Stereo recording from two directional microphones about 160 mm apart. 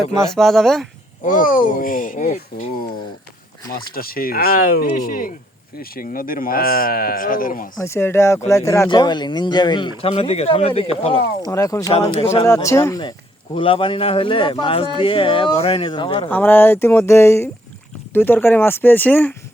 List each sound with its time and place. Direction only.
0.1 s speech: centre (ahead or behind)
1.2 s speech: 60° left (ahead or behind)
3.8 s speech: 65° left (ahead or behind)
7.8 s speech: 15° left (ahead or behind); by 11.2 s 35° left (ahead or behind)
11.4 s speech: 20° left (ahead or behind)
12.6 s speech: 20° left (ahead or behind)
13.6 s speech: 35° left (ahead or behind)
16.3 s speech: 10° left (ahead or behind)